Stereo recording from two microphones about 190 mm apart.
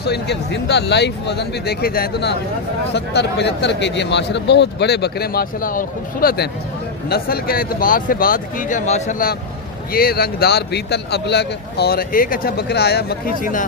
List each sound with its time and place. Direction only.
0.0 s speech: 60° left (ahead or behind)
2.9 s speech: 65° left (ahead or behind); by 13.7 s 45° left (ahead or behind)